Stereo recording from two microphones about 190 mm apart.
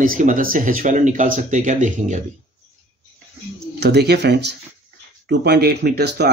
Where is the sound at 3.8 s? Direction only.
60° right (ahead or behind).